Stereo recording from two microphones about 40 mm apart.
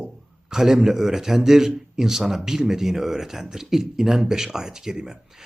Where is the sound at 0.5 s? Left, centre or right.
Centre.